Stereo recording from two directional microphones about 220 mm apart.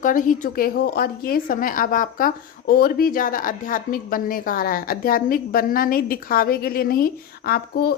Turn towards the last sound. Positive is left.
turn(degrees=45)  # may be behind; listen again after turning